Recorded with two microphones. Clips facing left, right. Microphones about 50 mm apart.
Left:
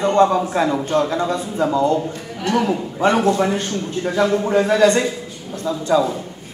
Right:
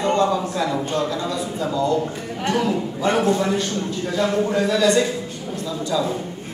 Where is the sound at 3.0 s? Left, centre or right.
Left.